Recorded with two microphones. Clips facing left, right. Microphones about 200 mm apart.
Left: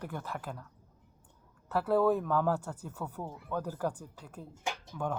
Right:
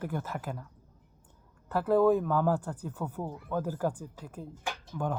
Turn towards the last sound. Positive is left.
turn(degrees=-5)  # may be behind; listen again after turning